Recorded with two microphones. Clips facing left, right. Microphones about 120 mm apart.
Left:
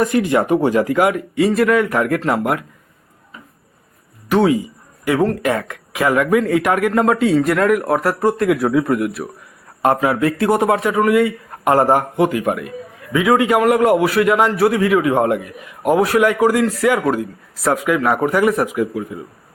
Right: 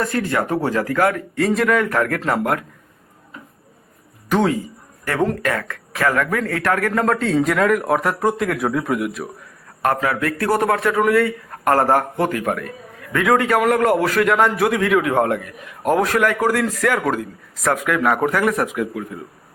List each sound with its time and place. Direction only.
0.0 s speech: 20° left (ahead or behind)
4.3 s speech: 5° left (ahead or behind)
9.8 s speech: 20° left (ahead or behind); by 19.2 s 5° left (ahead or behind)